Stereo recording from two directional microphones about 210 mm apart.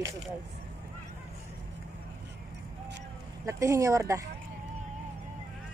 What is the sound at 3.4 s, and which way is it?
Speech, 15° right (ahead or behind).